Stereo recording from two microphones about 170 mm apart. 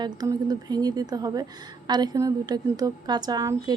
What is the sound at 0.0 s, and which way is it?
A woman's voice, 25° right (ahead or behind).